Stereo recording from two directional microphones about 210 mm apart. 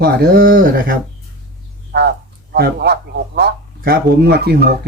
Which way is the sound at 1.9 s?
50° right (ahead or behind).